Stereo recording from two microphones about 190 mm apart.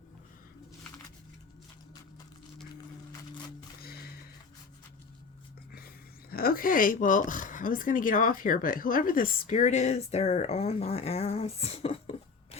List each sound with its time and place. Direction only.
3.8 s music: 55° left (ahead or behind)
6.3 s speech: 50° left (ahead or behind); by 12.5 s 30° left (ahead or behind)